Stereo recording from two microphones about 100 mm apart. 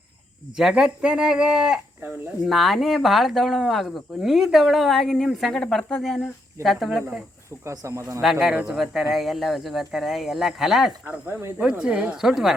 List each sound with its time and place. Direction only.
0.5 s speech: 5° right (ahead or behind)
7.6 s speech: 30° right (ahead or behind)
8.2 s speech: 5° right (ahead or behind)
11.0 s speech: 20° right (ahead or behind)
11.6 s speech: 10° right (ahead or behind)